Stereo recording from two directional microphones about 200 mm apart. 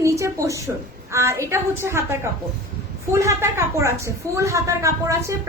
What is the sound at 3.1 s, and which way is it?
A woman's voice, 15° right (ahead or behind).